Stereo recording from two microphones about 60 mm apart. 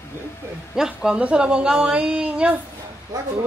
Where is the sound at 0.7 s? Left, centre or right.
Centre.